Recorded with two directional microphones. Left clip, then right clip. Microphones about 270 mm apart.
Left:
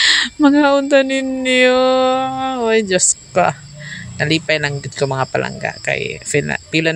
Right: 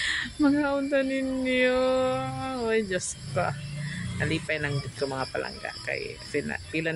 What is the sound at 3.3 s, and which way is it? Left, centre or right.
Speech, left.